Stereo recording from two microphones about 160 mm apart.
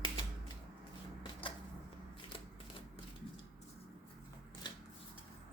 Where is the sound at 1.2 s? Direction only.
30° left (ahead or behind).